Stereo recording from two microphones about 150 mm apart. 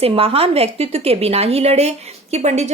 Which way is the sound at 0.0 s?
40° right (ahead or behind).